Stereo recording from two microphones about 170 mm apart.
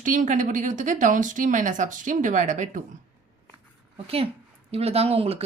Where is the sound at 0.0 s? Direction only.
50° right (ahead or behind).